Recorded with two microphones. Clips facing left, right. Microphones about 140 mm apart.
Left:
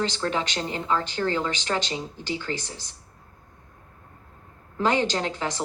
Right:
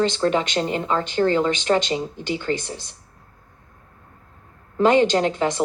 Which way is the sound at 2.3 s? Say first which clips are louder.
Right 6 dB; 60° right (ahead or behind).